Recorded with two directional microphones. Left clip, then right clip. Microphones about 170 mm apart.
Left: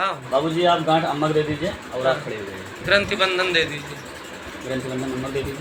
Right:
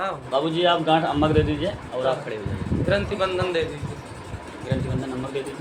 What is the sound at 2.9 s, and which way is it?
Speech, 30° right (ahead or behind).